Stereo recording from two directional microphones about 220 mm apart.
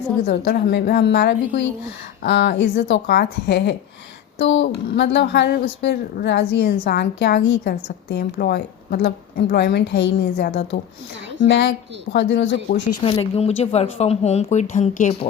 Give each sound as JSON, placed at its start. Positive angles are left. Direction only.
{"t": 0.3, "sound": "speech", "side_deg": 50}
{"t": 12.1, "sound": "speech", "side_deg": 50}
{"t": 13.0, "sound": "speech", "side_deg": 25}